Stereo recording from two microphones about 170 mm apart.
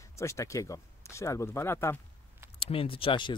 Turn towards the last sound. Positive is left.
turn(degrees=30)  # may be behind; listen again after turning